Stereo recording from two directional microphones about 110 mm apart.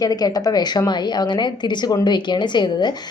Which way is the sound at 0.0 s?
35° left (ahead or behind).